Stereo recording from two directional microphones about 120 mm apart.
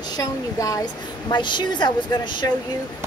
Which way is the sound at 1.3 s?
40° left (ahead or behind).